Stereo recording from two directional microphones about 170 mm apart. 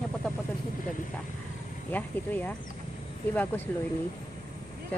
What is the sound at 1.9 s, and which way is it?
Speech, 10° left (ahead or behind).